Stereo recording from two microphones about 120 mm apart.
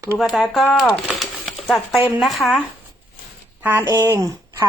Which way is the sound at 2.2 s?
Centre (ahead or behind).